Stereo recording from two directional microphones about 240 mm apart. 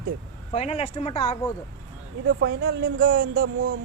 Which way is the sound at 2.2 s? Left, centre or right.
Right.